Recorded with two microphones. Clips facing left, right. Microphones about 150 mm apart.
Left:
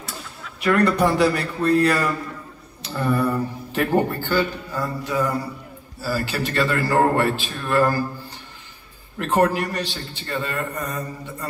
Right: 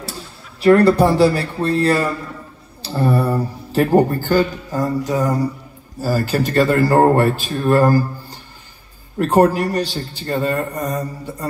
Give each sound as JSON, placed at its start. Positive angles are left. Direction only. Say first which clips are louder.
{"t": 0.6, "sound": "a man's voice", "louder": "right 7 dB", "side_deg": -30}
{"t": 9.2, "sound": "a man's voice", "louder": "right 5 dB", "side_deg": -40}